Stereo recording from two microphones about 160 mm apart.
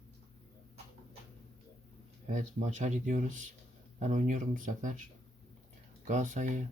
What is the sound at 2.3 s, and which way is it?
Speech, 50° right (ahead or behind).